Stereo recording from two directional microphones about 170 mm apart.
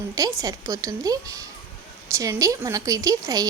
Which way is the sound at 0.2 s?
20° right (ahead or behind).